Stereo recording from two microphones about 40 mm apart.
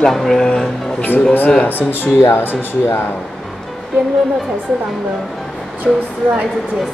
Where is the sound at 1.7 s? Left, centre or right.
Left.